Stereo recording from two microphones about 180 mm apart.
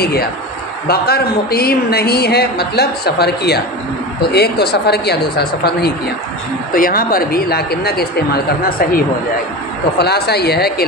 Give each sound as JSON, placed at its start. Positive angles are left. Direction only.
{"t": 0.0, "sound": "a woman's voice", "side_deg": 60}